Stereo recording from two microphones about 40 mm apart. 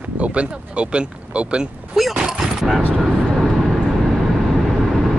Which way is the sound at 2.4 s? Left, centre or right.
Centre.